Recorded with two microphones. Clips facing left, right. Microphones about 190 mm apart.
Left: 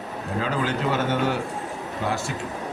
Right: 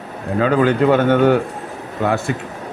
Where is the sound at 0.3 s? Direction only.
60° right (ahead or behind).